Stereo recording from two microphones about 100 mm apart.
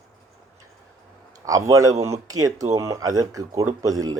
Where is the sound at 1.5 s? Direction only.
35° right (ahead or behind).